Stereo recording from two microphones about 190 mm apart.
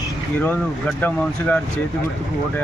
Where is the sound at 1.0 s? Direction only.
10° left (ahead or behind).